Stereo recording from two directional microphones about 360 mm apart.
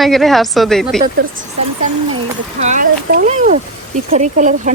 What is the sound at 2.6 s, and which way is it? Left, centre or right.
Speech, right.